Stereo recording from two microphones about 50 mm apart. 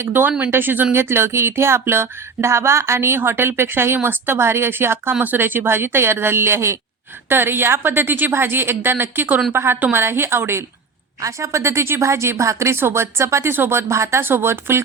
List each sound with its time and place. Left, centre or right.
0.0 s a woman's voice: right
0.9 s speech: right
5.2 s a woman's voice: right
7.3 s a woman's voice: right
11.3 s speech: right
12.7 s speech: right
14.2 s a woman's voice: right